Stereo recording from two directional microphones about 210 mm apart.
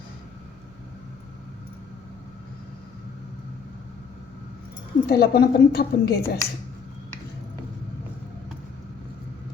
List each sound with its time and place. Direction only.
5.0 s a woman's voice: 50° left (ahead or behind)